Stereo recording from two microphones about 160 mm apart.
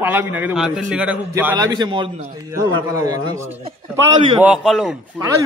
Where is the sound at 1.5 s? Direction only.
25° right (ahead or behind).